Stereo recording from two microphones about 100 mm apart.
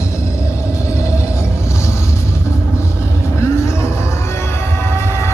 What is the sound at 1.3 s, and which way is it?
Music, 30° left (ahead or behind).